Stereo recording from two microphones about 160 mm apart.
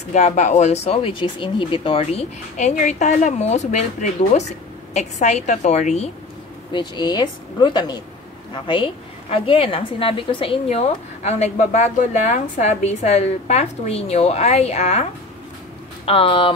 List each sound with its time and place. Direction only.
0.1 s a woman's voice: 45° left (ahead or behind)
6.7 s a woman's voice: 25° left (ahead or behind); by 15.0 s 45° left (ahead or behind)
16.1 s speech: 35° left (ahead or behind)